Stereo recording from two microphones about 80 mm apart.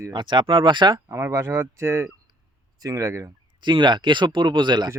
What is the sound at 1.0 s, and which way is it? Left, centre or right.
Speech, right.